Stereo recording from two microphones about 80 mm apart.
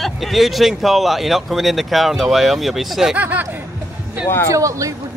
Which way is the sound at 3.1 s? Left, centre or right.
Right.